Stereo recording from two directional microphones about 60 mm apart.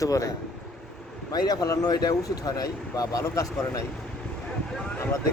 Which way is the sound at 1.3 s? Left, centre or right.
Left.